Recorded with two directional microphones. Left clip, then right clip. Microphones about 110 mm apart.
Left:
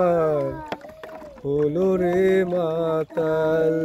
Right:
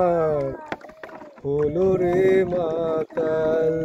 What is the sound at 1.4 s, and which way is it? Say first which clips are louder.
Speech: even; 10° left (ahead or behind).